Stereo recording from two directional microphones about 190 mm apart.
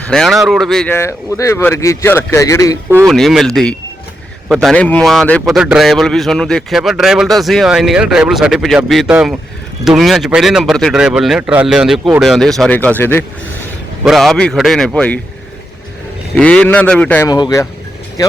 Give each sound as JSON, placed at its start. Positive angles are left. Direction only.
{"t": 0.0, "sound": "speech", "side_deg": 5}
{"t": 3.1, "sound": "a man's voice", "side_deg": 0}
{"t": 14.0, "sound": "a man's voice", "side_deg": 0}
{"t": 16.3, "sound": "speech", "side_deg": 5}
{"t": 17.2, "sound": "speech", "side_deg": 20}